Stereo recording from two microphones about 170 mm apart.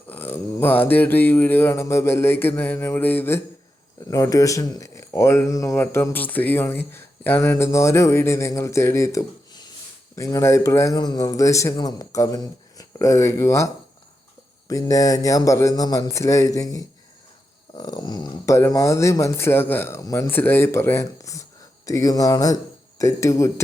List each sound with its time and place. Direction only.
0.1 s a man's voice: 10° left (ahead or behind)
14.7 s a man's voice: 20° left (ahead or behind)